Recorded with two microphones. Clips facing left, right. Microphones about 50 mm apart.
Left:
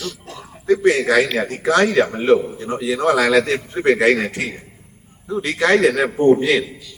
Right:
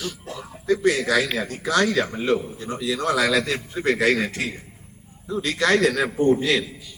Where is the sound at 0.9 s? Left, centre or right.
Left.